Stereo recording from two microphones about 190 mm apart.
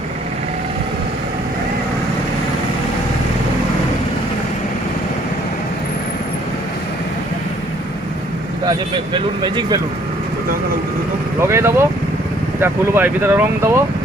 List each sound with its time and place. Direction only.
9.1 s speech: 25° right (ahead or behind)
11.3 s speech: 15° right (ahead or behind)